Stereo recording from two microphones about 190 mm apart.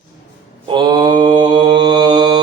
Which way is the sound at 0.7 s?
25° right (ahead or behind).